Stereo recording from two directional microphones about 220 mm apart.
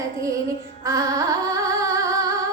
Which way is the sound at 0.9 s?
15° right (ahead or behind).